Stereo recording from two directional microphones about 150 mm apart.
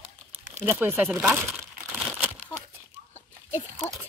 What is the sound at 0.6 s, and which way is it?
Speech, 10° right (ahead or behind).